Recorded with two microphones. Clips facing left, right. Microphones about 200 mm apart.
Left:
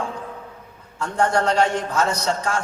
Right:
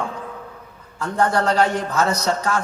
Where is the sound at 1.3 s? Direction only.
35° right (ahead or behind).